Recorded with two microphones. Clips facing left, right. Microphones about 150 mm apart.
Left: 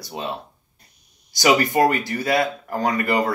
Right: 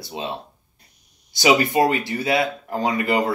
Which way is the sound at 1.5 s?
20° right (ahead or behind).